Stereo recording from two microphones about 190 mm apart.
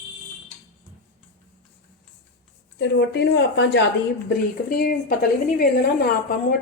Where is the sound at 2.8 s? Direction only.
65° left (ahead or behind).